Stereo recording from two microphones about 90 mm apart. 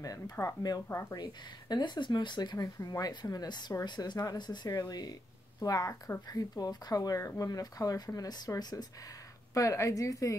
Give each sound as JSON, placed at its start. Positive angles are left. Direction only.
{"t": 0.0, "sound": "a woman's voice", "side_deg": 40}
{"t": 2.6, "sound": "speech", "side_deg": 40}
{"t": 9.5, "sound": "a woman's voice", "side_deg": 35}